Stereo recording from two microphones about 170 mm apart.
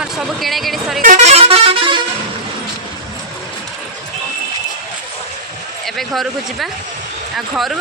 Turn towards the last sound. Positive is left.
turn(degrees=0)  # may be behind; listen again after turning